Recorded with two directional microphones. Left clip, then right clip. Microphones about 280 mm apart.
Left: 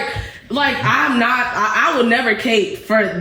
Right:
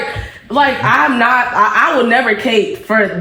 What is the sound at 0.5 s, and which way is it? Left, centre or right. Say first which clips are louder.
A man's voice: right 5 dB; centre.